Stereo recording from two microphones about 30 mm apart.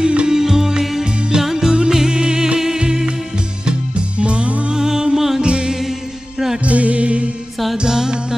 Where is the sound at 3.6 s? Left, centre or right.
Right.